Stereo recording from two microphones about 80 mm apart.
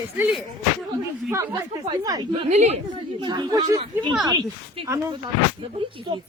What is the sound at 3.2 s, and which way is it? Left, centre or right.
Speech, right.